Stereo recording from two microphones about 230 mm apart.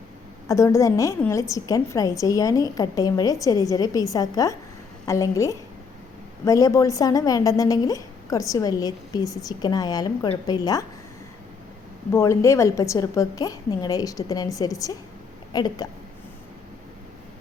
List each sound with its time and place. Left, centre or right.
0.4 s a woman's voice: centre
12.1 s a woman's voice: centre